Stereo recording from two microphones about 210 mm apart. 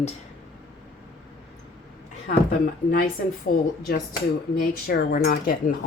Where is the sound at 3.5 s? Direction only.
40° left (ahead or behind).